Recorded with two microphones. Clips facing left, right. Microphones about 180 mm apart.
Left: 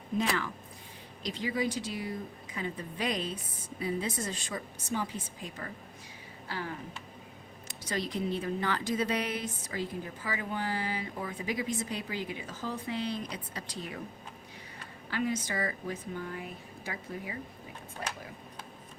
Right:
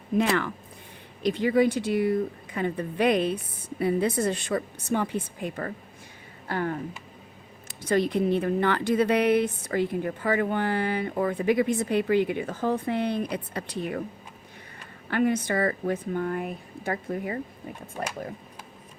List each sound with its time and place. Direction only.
0.2 s speech: 65° right (ahead or behind)
7.8 s speech: 55° right (ahead or behind)
15.1 s speech: 60° right (ahead or behind)